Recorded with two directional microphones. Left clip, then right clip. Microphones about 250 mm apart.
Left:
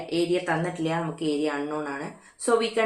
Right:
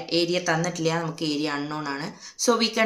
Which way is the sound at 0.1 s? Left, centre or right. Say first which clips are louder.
Right 2 dB; right.